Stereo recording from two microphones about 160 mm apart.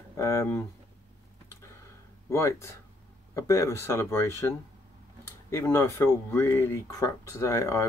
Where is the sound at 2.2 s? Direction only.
15° left (ahead or behind).